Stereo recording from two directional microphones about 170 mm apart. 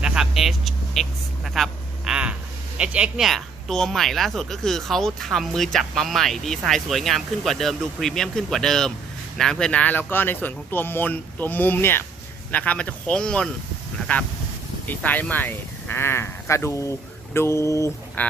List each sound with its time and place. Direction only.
0.0 s vehicle: 5° right (ahead or behind)
1.5 s speech: centre (ahead or behind)
14.8 s speech: 10° left (ahead or behind)